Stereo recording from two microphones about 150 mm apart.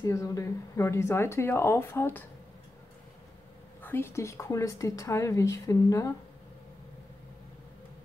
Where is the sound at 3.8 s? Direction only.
15° left (ahead or behind).